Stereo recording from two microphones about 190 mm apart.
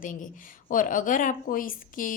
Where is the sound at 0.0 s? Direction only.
45° left (ahead or behind).